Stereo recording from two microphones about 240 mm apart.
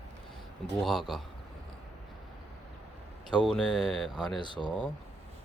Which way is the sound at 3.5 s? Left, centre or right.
Centre.